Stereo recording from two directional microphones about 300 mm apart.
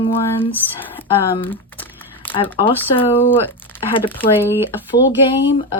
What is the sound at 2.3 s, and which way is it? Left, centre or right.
Speech, centre.